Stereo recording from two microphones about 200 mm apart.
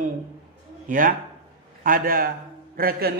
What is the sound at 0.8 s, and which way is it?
Speech, 40° right (ahead or behind).